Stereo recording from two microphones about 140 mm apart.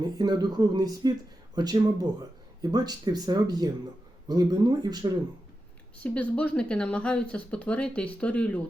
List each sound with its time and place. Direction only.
0.0 s speech: 30° right (ahead or behind)
6.0 s speech: 10° left (ahead or behind)